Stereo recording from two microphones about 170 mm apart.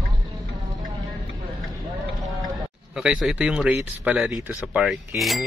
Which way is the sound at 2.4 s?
5° right (ahead or behind).